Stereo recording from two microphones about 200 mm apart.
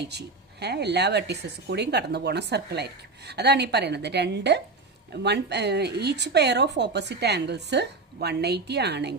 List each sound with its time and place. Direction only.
0.0 s speech: 55° right (ahead or behind)